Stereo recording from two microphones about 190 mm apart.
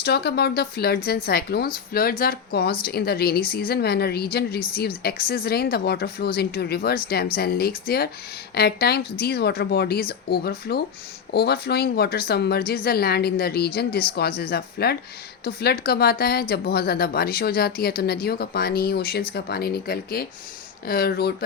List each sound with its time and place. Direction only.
0.0 s speech: 60° left (ahead or behind)